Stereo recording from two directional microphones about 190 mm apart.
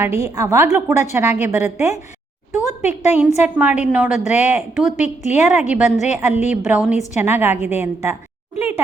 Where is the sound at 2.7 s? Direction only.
35° left (ahead or behind).